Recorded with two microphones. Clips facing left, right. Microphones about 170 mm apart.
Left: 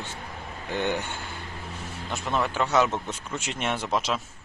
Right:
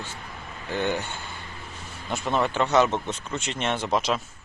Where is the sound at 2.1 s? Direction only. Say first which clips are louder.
Right 3 dB; centre (ahead or behind).